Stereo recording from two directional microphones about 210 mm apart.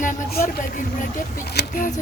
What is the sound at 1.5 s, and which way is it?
Speech, 45° left (ahead or behind).